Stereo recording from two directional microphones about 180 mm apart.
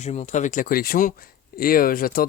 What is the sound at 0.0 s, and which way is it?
Speech, 40° left (ahead or behind).